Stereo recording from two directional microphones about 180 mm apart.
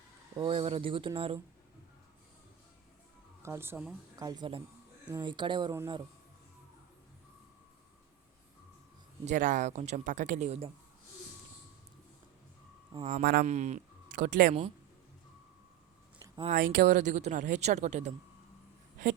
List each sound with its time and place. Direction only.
0.3 s speech: 30° right (ahead or behind)
3.4 s speech: 15° right (ahead or behind)
4.2 s speech: 20° right (ahead or behind)
9.2 s speech: 45° right (ahead or behind)
13.1 s speech: 50° right (ahead or behind)
13.4 s speech: 40° right (ahead or behind)
16.5 s speech: 50° right (ahead or behind)